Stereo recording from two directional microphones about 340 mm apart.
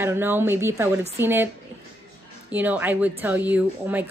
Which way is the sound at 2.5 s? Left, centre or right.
Centre.